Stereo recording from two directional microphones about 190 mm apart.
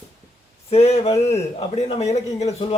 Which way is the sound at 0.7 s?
35° left (ahead or behind).